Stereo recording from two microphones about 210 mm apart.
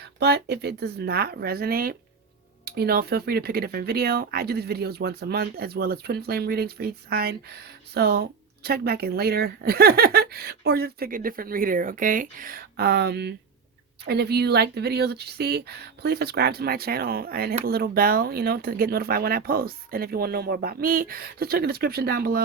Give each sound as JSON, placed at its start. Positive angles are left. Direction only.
{"t": 0.0, "sound": "speech", "side_deg": -50}